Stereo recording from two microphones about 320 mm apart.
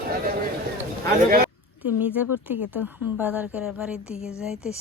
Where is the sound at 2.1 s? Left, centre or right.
Centre.